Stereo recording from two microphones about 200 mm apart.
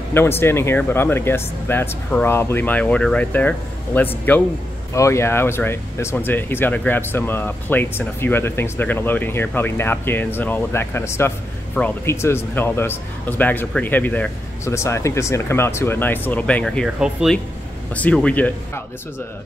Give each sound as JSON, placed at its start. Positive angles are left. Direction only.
{"t": 0.1, "sound": "speech", "side_deg": 10}